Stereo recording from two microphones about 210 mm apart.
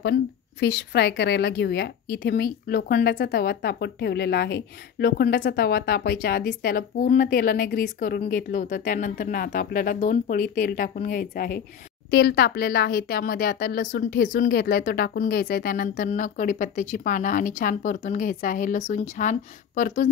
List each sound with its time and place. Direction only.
0.6 s speech: 55° left (ahead or behind)